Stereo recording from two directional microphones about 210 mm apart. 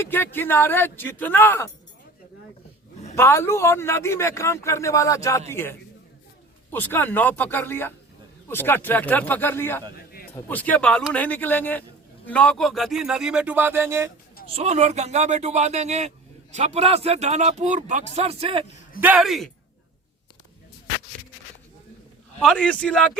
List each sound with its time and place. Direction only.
0.0 s a man's voice: 10° left (ahead or behind)
3.2 s a man's voice: 10° left (ahead or behind)
9.9 s a sound: 45° left (ahead or behind)
10.3 s a man's voice: 10° left (ahead or behind); by 14.1 s 10° right (ahead or behind)
14.5 s speech: 30° right (ahead or behind)
18.9 s speech: 5° right (ahead or behind)
22.4 s speech: 5° left (ahead or behind)